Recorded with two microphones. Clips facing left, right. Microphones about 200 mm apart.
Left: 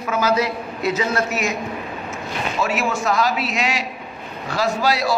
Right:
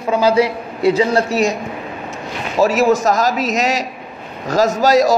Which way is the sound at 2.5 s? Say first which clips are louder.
Right 10 dB; 40° right (ahead or behind).